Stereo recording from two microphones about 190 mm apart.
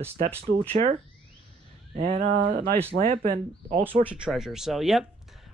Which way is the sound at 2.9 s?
80° right.